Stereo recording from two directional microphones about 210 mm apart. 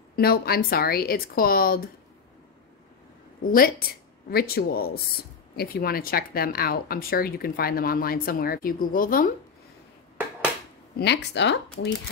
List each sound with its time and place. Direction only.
0.1 s speech: 45° left (ahead or behind)
3.4 s speech: 40° left (ahead or behind)
11.0 s speech: 55° left (ahead or behind)